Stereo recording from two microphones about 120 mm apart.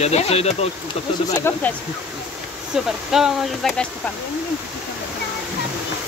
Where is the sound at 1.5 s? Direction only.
20° left (ahead or behind).